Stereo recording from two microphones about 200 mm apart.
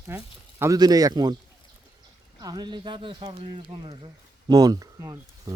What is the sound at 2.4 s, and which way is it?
A man's voice, 20° right (ahead or behind).